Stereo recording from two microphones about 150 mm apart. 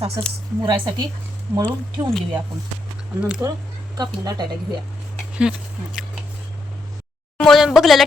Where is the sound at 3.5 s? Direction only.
25° right (ahead or behind).